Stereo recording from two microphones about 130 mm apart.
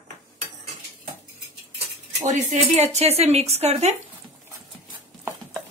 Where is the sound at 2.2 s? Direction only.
65° right (ahead or behind).